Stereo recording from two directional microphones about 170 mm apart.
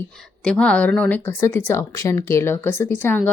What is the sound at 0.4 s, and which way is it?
A woman's voice, 5° left (ahead or behind).